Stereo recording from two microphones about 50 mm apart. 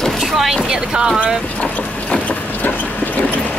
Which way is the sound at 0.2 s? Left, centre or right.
Centre.